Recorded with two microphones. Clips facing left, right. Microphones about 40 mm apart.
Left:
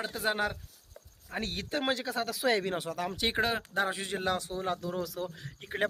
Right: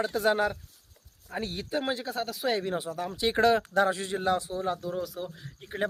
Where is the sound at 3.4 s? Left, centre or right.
Centre.